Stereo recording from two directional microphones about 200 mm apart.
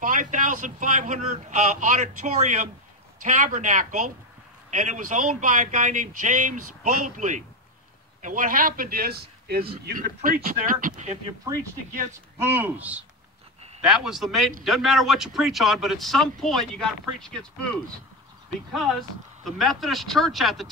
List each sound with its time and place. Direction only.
0.0 s a man's voice: 40° right (ahead or behind)
12.4 s speech: 10° right (ahead or behind)
18.7 s speech: centre (ahead or behind)